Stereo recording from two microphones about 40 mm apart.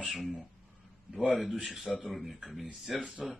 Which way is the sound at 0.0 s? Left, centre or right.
Centre.